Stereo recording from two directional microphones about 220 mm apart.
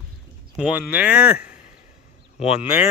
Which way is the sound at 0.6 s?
5° right (ahead or behind).